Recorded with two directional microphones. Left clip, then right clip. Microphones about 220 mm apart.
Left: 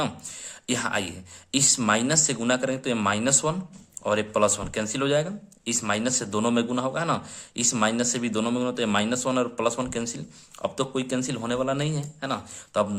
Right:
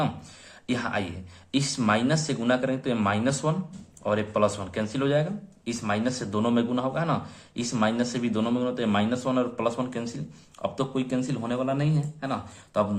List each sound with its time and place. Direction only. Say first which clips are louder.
0.7 s a man's voice: left 2 dB; 35° left (ahead or behind)